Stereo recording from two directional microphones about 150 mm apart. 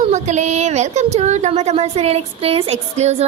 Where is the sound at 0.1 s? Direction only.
50° right (ahead or behind).